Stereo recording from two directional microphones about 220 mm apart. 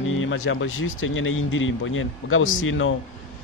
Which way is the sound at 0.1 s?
65° left (ahead or behind).